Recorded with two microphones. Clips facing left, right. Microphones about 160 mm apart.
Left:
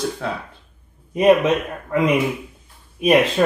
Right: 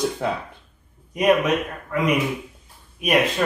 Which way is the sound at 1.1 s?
30° left (ahead or behind).